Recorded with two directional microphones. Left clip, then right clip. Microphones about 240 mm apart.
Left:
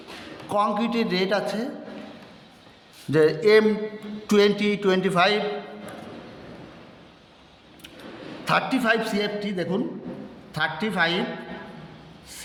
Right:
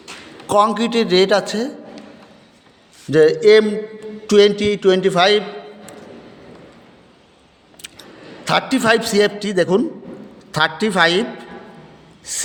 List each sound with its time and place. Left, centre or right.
0.4 s a man's voice: right
3.1 s speech: right
8.4 s a man's voice: right
12.3 s a man's voice: right